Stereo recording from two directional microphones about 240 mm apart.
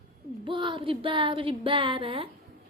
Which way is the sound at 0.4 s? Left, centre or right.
Centre.